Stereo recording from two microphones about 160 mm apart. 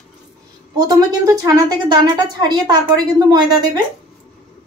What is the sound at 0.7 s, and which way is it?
A woman's voice, 25° right (ahead or behind).